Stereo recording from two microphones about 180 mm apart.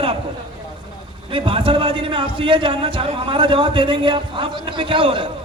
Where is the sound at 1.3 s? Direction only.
30° right (ahead or behind).